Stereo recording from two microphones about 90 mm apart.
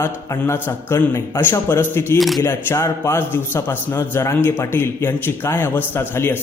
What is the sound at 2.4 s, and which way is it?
A man's voice, 30° left (ahead or behind).